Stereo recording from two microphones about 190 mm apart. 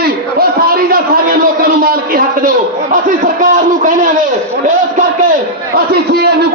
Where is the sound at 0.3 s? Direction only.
50° right (ahead or behind).